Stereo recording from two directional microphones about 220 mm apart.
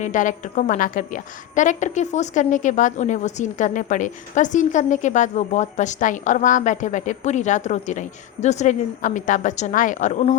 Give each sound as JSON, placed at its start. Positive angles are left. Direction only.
{"t": 0.0, "sound": "a woman's voice", "side_deg": 35}